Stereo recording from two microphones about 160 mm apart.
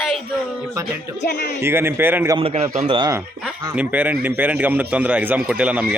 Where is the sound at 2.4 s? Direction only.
35° right (ahead or behind).